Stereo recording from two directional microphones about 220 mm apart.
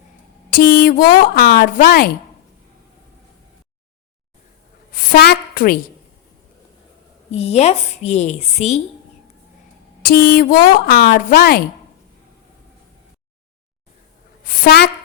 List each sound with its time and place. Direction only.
0.5 s a woman's voice: 40° left (ahead or behind)
4.9 s a sound: 45° left (ahead or behind)
7.3 s a woman's voice: 30° left (ahead or behind)
10.0 s a woman's voice: 40° left (ahead or behind)
14.4 s a woman's voice: 40° left (ahead or behind)